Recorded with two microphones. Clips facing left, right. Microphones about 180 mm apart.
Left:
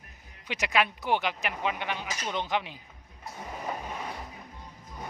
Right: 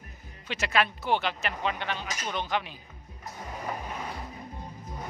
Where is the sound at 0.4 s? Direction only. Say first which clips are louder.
Even; 15° left (ahead or behind).